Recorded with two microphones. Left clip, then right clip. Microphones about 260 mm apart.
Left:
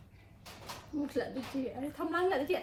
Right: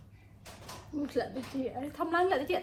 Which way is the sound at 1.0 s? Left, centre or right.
Centre.